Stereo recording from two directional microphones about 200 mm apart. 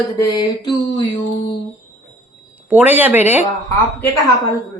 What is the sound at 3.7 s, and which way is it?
Speech, 15° left (ahead or behind).